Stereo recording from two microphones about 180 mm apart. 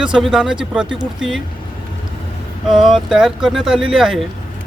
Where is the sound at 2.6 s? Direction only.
Centre (ahead or behind).